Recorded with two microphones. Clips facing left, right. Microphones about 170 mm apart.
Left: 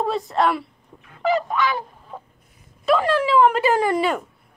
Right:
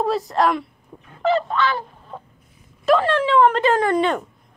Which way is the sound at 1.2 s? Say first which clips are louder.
Right 1 dB; 10° left (ahead or behind).